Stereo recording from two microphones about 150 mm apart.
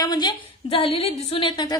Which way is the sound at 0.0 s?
30° left (ahead or behind).